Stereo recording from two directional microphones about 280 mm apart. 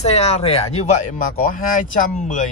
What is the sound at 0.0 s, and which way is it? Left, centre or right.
Speech, left.